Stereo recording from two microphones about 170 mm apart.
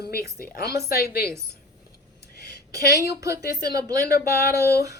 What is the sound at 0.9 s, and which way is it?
Speech, 65° left (ahead or behind).